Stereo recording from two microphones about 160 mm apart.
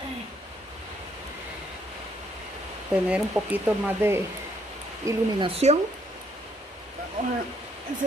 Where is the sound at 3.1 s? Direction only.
10° right (ahead or behind).